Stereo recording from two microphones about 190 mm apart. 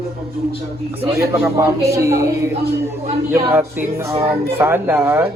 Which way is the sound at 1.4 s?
15° right (ahead or behind).